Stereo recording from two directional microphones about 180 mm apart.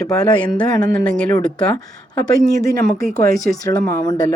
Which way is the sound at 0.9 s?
5° left (ahead or behind).